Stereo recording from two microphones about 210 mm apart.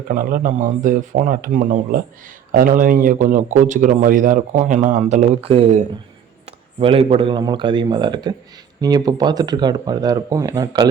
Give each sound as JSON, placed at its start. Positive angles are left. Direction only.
{"t": 0.1, "sound": "a man's voice", "side_deg": -45}